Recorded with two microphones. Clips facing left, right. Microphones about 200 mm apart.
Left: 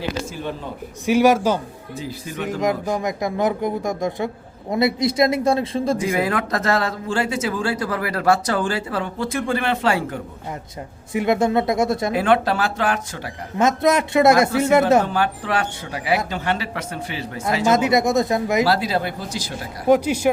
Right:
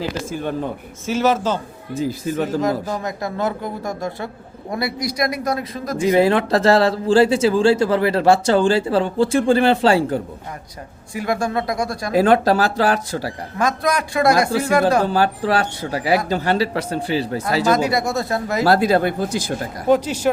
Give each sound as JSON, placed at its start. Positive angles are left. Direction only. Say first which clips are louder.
{"t": 1.0, "sound": "speech", "louder": "left 3 dB", "side_deg": 15}
{"t": 1.9, "sound": "speech", "louder": "right 9 dB", "side_deg": -45}
{"t": 2.5, "sound": "speech", "louder": "right 1 dB", "side_deg": 15}
{"t": 6.0, "sound": "speech", "louder": "right 6 dB", "side_deg": -30}
{"t": 11.1, "sound": "speech", "louder": "left 3 dB", "side_deg": 20}
{"t": 12.1, "sound": "speech", "louder": "right 8 dB", "side_deg": -40}
{"t": 13.6, "sound": "speech", "louder": "left 3 dB", "side_deg": 25}
{"t": 15.0, "sound": "speech", "louder": "right 4 dB", "side_deg": -35}
{"t": 17.7, "sound": "speech", "louder": "left 3 dB", "side_deg": 20}
{"t": 18.6, "sound": "speech", "louder": "right 5 dB", "side_deg": -50}
{"t": 19.9, "sound": "speech", "louder": "left 1 dB", "side_deg": 10}